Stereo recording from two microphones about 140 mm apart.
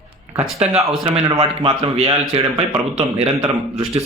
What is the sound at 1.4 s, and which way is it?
Speech, 40° right (ahead or behind).